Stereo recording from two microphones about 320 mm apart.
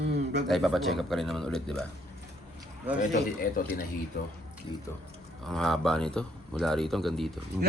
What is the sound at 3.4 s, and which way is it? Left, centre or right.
Speech, left.